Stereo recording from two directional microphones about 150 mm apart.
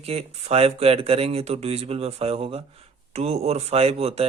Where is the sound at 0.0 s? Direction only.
40° right (ahead or behind).